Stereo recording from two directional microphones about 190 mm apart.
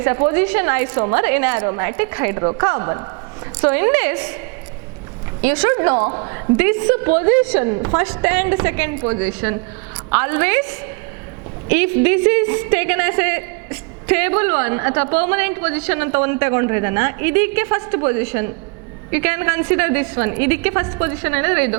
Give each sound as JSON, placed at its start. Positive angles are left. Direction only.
{"t": 0.0, "sound": "a woman's voice", "side_deg": -15}
{"t": 3.6, "sound": "a woman's voice", "side_deg": -10}
{"t": 5.4, "sound": "a woman's voice", "side_deg": -10}
{"t": 6.1, "sound": "a woman's voice", "side_deg": -25}